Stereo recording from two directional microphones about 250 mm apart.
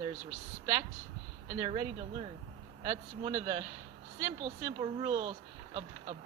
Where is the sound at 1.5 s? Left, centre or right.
Right.